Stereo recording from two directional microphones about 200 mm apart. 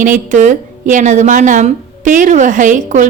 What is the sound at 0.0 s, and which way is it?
A woman's voice, 40° right (ahead or behind).